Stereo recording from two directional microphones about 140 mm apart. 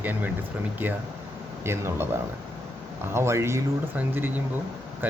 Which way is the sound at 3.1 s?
20° right (ahead or behind).